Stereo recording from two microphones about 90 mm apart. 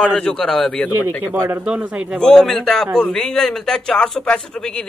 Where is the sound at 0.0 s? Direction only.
10° left (ahead or behind).